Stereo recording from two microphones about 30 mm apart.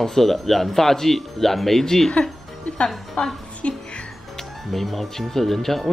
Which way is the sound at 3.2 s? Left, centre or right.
Left.